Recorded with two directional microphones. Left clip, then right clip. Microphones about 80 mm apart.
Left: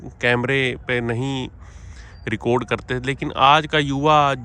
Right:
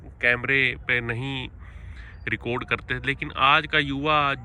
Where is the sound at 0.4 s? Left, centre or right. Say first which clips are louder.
Left 1 dB; left.